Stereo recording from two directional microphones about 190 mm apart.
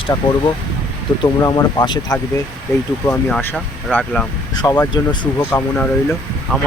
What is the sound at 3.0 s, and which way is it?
Speech, 10° left (ahead or behind).